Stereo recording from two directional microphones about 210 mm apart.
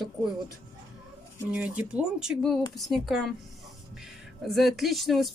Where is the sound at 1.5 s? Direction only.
5° right (ahead or behind).